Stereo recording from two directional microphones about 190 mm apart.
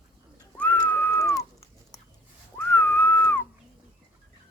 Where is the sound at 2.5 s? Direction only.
10° left (ahead or behind).